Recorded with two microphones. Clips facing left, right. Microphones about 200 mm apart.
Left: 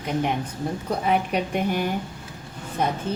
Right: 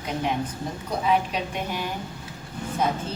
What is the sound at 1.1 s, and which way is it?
Speech, 55° left (ahead or behind).